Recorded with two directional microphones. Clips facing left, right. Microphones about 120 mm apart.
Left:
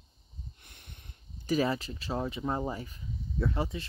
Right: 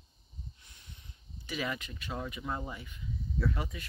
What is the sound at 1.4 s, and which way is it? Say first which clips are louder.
Speech: left 8 dB; 35° left (ahead or behind).